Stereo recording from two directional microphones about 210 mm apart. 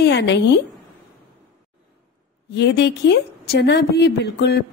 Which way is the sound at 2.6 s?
55° left (ahead or behind).